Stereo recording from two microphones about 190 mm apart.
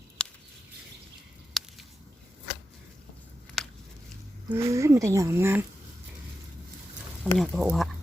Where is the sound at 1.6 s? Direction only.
Centre (ahead or behind).